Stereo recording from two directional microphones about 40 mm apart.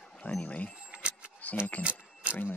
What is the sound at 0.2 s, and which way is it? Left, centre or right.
Speech, left.